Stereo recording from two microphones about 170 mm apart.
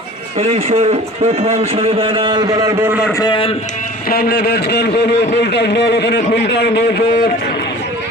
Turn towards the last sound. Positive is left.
turn(degrees=75)  # may be behind; listen again after turning